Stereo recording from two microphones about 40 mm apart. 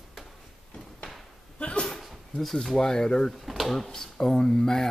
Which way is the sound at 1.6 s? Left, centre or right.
Left.